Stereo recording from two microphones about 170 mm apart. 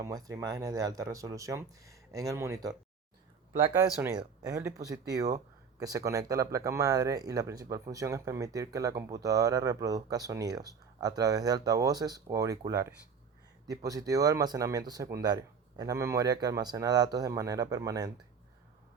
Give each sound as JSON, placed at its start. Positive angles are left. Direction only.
{"t": 0.0, "sound": "speech", "side_deg": -20}